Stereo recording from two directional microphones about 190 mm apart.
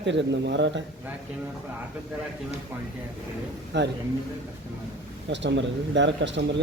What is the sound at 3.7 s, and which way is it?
Speech, 65° right (ahead or behind).